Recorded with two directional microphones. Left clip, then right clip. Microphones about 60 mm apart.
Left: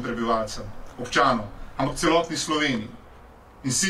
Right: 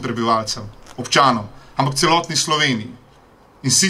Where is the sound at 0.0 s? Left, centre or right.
Right.